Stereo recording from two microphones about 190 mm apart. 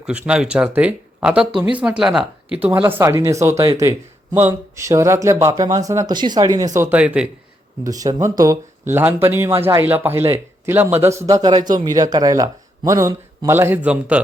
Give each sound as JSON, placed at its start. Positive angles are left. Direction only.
{"t": 0.0, "sound": "speech", "side_deg": -5}
{"t": 6.7, "sound": "speech", "side_deg": -10}
{"t": 7.9, "sound": "speech", "side_deg": -20}